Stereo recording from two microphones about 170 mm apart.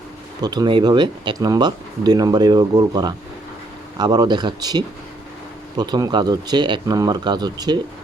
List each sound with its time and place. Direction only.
0.4 s speech: 25° right (ahead or behind)